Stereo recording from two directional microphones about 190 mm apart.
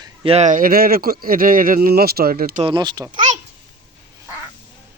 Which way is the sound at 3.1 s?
40° right (ahead or behind).